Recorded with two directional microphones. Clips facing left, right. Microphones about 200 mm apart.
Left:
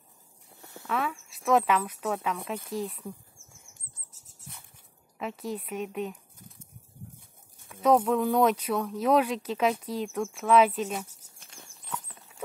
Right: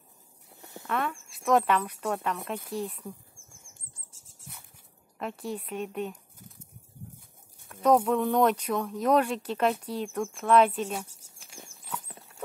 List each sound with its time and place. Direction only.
0.6 s a sound: 15° right (ahead or behind)
0.8 s speech: centre (ahead or behind)
5.2 s speech: centre (ahead or behind)
7.6 s speech: centre (ahead or behind)
11.1 s insect: 30° right (ahead or behind)
11.3 s walk: 10° right (ahead or behind)